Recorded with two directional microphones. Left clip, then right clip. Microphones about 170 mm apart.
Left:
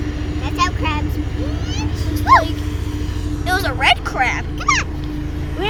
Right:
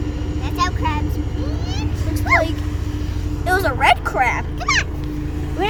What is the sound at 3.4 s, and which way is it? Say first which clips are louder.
Vehicle: right 1 dB; 65° right (ahead or behind).